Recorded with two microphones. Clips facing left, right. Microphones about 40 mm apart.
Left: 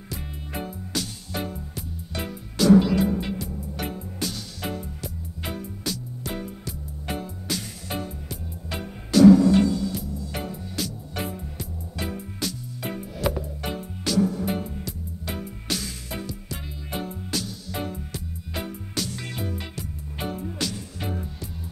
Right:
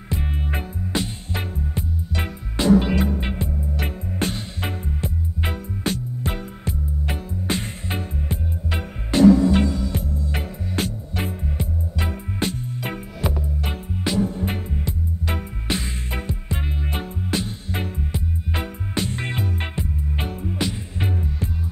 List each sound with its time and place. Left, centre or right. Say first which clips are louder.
0.1 s music: right 7 dB; right
13.2 s music: left 1 dB; centre
13.7 s music: right 2 dB; right